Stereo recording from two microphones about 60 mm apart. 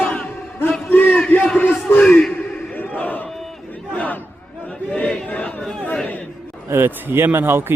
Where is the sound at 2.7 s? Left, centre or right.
Left.